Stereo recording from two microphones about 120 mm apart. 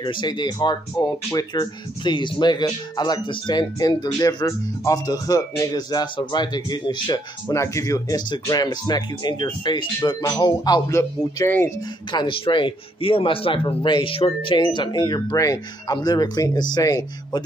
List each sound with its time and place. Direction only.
0.0 s speech: 40° left (ahead or behind)
7.5 s speech: 25° left (ahead or behind)
12.1 s speech: 45° left (ahead or behind)